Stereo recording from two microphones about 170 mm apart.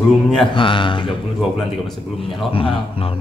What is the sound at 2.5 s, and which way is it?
Speech, 35° left (ahead or behind).